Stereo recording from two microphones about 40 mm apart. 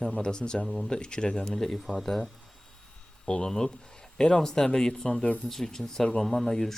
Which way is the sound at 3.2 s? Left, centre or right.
Centre.